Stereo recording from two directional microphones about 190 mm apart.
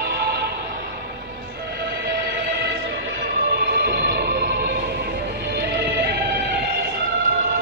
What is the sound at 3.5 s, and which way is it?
Music, 55° right (ahead or behind).